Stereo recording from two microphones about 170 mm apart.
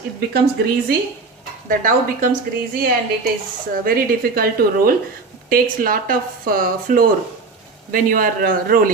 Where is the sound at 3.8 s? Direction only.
60° right (ahead or behind).